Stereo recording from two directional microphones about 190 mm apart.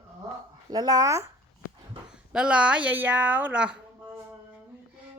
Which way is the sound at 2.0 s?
5° right (ahead or behind).